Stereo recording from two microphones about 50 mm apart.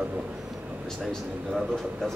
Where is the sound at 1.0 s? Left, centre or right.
Centre.